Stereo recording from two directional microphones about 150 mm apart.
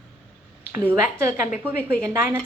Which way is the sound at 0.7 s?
15° right (ahead or behind).